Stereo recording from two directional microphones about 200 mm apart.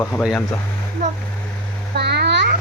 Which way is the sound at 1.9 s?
55° right (ahead or behind).